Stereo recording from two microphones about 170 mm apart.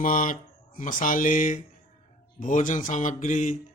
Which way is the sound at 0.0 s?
55° left (ahead or behind).